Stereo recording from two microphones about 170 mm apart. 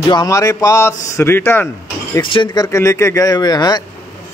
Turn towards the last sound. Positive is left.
turn(degrees=25)  # may be behind; listen again after turning